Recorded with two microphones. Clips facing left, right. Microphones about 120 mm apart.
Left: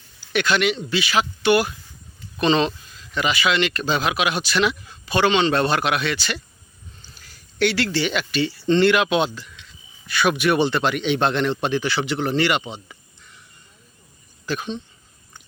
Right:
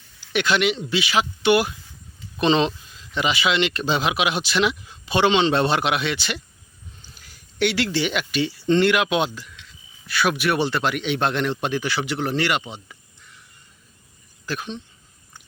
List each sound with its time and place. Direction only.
0.3 s speech: 20° right (ahead or behind)
7.0 s a sound: 15° right (ahead or behind)
7.9 s a man's voice: 15° right (ahead or behind)
14.4 s speech: centre (ahead or behind)